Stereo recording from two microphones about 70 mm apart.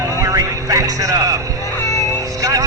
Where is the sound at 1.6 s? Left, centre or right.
Left.